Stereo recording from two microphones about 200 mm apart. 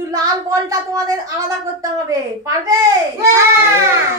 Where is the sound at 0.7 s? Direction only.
15° right (ahead or behind).